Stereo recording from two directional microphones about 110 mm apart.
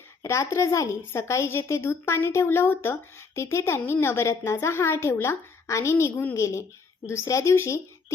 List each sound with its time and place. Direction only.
0.2 s a woman's voice: 25° left (ahead or behind)